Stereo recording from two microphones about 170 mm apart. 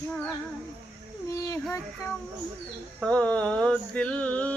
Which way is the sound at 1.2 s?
20° left (ahead or behind).